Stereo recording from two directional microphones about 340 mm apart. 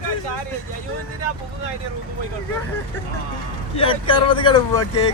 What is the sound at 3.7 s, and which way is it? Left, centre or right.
Speech, centre.